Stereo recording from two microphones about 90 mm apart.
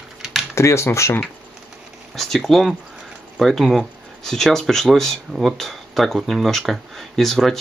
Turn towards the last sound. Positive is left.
turn(degrees=0)  # may be behind; listen again after turning